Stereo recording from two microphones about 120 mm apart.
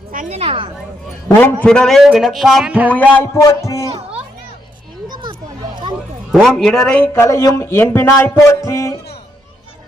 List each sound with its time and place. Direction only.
0.2 s a woman's voice: 65° right (ahead or behind)
1.3 s a man's voice: 15° left (ahead or behind)
1.6 s a man's voice: 5° left (ahead or behind)
2.9 s a man's voice: 15° left (ahead or behind)
3.4 s speech: 25° left (ahead or behind)
5.0 s a sound: 40° right (ahead or behind)
6.3 s a man's voice: 5° left (ahead or behind)
7.1 s speech: 25° left (ahead or behind)
8.1 s a sound: 25° left (ahead or behind)